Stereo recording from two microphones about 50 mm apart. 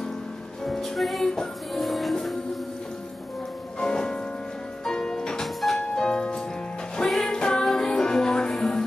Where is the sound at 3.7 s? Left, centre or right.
Centre.